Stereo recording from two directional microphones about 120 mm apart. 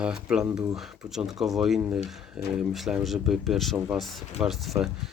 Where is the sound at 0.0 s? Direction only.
5° right (ahead or behind).